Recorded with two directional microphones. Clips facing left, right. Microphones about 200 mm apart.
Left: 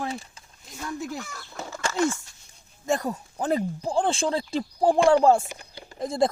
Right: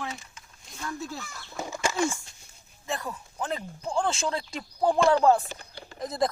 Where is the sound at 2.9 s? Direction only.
40° left (ahead or behind).